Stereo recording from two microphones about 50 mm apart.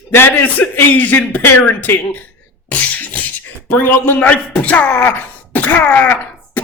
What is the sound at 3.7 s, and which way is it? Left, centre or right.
Speech, left.